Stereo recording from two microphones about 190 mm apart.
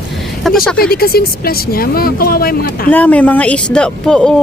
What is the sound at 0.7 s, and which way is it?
Speech, 55° left (ahead or behind).